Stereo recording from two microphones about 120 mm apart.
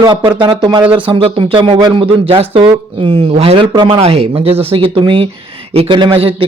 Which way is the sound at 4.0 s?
55° right (ahead or behind).